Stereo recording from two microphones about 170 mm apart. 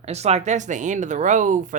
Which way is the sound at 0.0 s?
40° right (ahead or behind).